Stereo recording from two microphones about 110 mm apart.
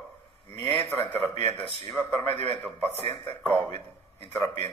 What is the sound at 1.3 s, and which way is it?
Speech, 65° right (ahead or behind).